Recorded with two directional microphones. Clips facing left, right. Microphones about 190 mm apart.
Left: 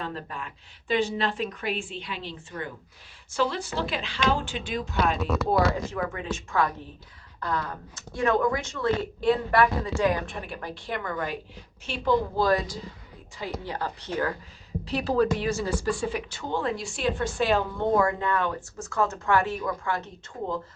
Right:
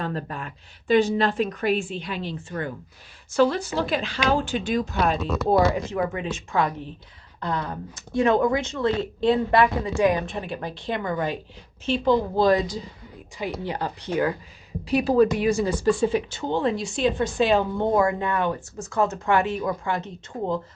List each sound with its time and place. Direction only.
0.0 s speech: 45° right (ahead or behind)
5.2 s speech: centre (ahead or behind)
5.8 s speech: 20° right (ahead or behind)